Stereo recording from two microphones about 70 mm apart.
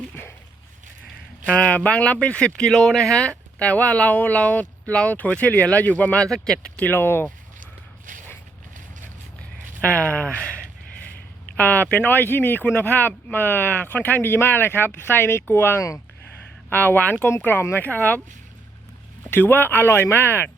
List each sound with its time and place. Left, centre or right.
0.1 s a sound: left
1.5 s speech: centre
6.2 s speech: centre
6.7 s speech: left
9.8 s speech: centre
17.8 s speech: left
19.2 s speech: left